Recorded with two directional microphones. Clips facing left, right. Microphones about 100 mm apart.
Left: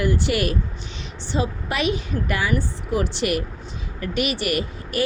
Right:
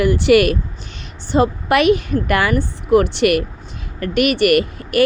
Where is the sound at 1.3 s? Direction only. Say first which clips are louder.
Right 10 dB; 65° right (ahead or behind).